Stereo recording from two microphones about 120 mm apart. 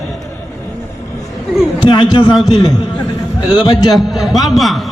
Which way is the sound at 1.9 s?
35° left (ahead or behind).